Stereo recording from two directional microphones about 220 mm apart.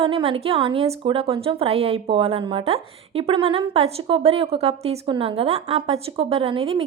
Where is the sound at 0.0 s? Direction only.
25° right (ahead or behind).